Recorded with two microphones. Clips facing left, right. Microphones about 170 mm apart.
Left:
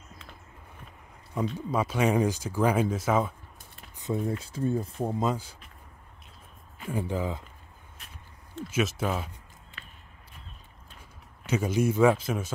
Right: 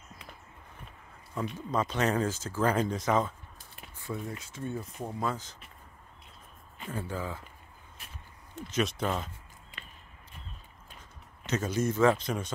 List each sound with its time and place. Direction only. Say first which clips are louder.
1.3 s speech: left 3 dB; 15° left (ahead or behind)
4.0 s speech: left 8 dB; 25° left (ahead or behind)
5.2 s speech: left 1 dB; 10° left (ahead or behind)
6.9 s speech: left 5 dB; 15° left (ahead or behind)
8.6 s speech: left 2 dB; 5° left (ahead or behind)
11.4 s speech: left 4 dB; 10° left (ahead or behind)